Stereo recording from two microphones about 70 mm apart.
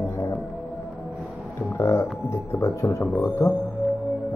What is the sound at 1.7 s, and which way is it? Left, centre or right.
Speech, left.